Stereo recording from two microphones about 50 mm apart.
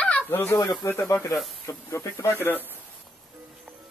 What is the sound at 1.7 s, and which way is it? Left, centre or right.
Speech, left.